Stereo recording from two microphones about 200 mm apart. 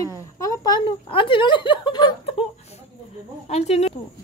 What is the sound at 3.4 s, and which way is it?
Speech, 30° left (ahead or behind).